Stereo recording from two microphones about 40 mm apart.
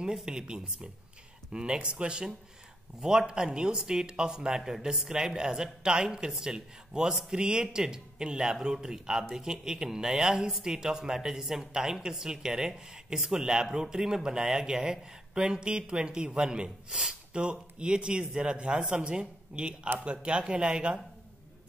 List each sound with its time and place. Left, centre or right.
0.0 s a man's voice: centre
17.3 s a man's voice: right